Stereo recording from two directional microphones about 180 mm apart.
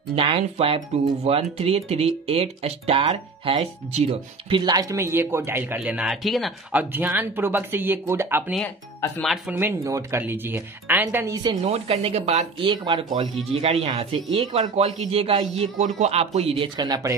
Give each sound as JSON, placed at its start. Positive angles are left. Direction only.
{"t": 0.1, "sound": "speech", "side_deg": -30}
{"t": 9.2, "sound": "speech", "side_deg": 0}
{"t": 9.6, "sound": "speech", "side_deg": -15}
{"t": 11.6, "sound": "speech", "side_deg": -35}
{"t": 12.5, "sound": "speech", "side_deg": -25}